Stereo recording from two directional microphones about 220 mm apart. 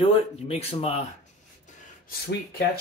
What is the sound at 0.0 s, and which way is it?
Speech, 25° left (ahead or behind).